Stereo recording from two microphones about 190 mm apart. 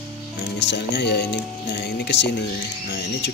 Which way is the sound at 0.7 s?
65° left (ahead or behind).